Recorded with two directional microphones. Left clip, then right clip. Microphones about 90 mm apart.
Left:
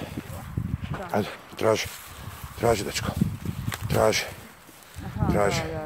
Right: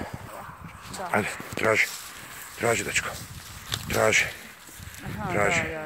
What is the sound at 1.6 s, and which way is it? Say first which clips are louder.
Speech: right 1 dB; 35° left (ahead or behind).